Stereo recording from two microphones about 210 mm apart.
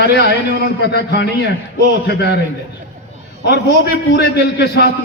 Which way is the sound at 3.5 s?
50° left (ahead or behind).